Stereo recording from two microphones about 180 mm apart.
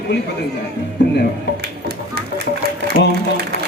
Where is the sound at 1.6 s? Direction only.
65° right (ahead or behind).